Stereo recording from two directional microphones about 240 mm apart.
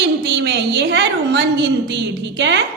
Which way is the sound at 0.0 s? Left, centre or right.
Right.